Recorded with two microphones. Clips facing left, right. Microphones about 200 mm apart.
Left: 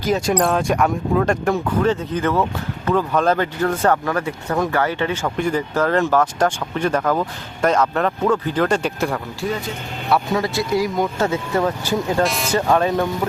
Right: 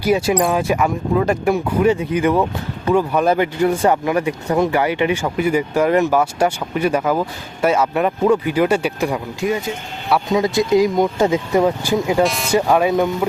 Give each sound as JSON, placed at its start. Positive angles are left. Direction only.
{"t": 0.0, "sound": "speech", "side_deg": -10}
{"t": 12.2, "sound": "speech", "side_deg": 0}
{"t": 12.5, "sound": "speech", "side_deg": -10}